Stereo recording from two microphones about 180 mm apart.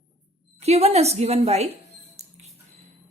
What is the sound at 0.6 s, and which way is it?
A woman's voice, 35° right (ahead or behind).